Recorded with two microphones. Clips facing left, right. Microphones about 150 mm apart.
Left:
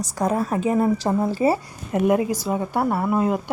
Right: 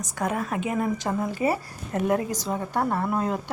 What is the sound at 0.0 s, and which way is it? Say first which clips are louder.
A woman's voice: left 5 dB; 35° left (ahead or behind).